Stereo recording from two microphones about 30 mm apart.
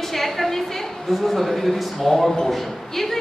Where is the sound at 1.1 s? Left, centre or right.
Centre.